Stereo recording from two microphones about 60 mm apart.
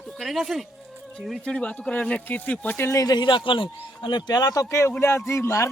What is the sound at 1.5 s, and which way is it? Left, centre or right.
Speech, centre.